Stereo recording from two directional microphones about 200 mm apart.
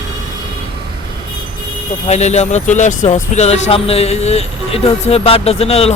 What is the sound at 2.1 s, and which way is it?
Speech, 35° left (ahead or behind).